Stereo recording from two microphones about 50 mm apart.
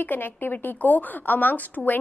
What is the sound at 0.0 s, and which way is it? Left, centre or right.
A woman's voice, left.